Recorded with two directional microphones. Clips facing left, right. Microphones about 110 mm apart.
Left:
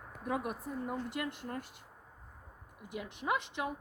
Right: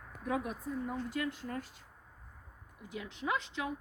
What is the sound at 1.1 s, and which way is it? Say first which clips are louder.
Speech: right 2 dB; 65° left (ahead or behind).